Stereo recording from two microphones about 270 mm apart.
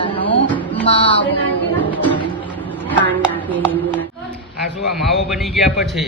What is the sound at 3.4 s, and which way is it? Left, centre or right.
Speech, centre.